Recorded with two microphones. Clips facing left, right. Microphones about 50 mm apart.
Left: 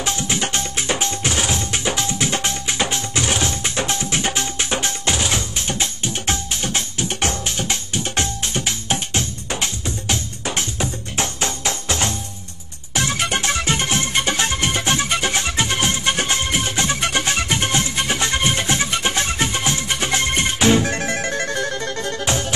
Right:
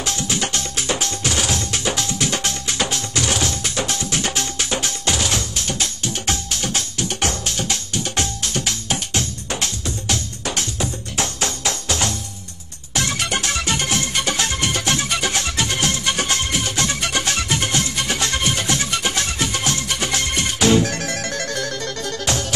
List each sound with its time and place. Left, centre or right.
0.0 s tabla: left
4.8 s music: left